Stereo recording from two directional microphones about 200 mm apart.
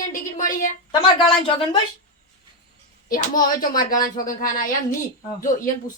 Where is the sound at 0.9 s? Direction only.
25° left (ahead or behind).